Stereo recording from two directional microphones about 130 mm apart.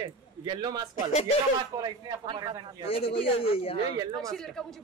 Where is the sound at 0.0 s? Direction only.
35° right (ahead or behind).